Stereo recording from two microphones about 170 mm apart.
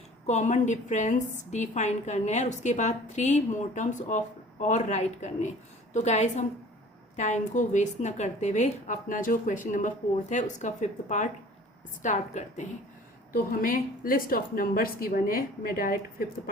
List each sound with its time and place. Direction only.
0.3 s a woman's voice: 40° left (ahead or behind)
13.3 s a woman's voice: 55° left (ahead or behind)